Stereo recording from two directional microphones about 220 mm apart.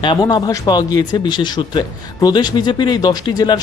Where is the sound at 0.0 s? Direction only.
20° left (ahead or behind).